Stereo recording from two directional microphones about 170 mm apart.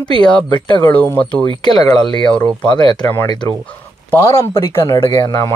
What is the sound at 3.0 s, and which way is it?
Speech, 10° left (ahead or behind).